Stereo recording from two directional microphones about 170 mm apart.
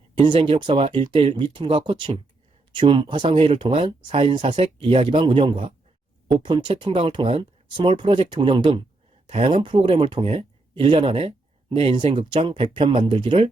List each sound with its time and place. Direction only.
0.2 s speech: 30° right (ahead or behind)